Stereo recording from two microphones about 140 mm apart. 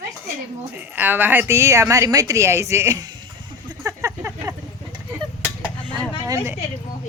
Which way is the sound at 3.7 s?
20° right (ahead or behind).